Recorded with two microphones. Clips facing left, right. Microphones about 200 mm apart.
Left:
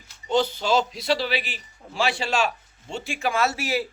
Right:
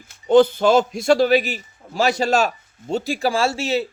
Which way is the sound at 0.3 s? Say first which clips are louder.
Right 9 dB; 55° right (ahead or behind).